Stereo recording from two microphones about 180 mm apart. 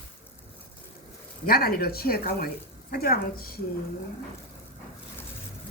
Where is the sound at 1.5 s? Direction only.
55° left (ahead or behind).